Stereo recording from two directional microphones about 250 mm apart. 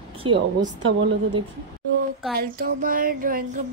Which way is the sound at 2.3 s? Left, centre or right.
Right.